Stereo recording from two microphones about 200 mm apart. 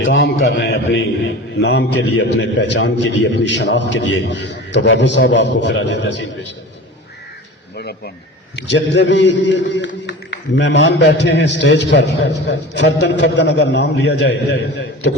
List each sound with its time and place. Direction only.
0.0 s a man's voice: 70° left (ahead or behind)
7.8 s a man's voice: 55° left (ahead or behind)